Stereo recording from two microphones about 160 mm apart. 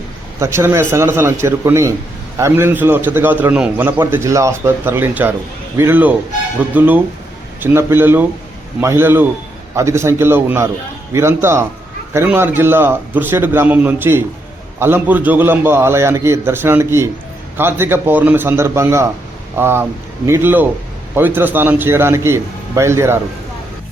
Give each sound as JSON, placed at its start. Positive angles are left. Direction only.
{"t": 0.3, "sound": "a man's voice", "side_deg": -15}